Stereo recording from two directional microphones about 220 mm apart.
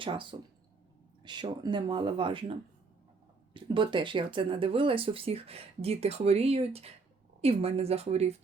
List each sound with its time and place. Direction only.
0.0 s speech: 20° right (ahead or behind)
3.5 s speech: 20° right (ahead or behind)